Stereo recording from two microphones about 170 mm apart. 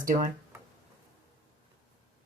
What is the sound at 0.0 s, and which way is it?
Speech, 55° right (ahead or behind).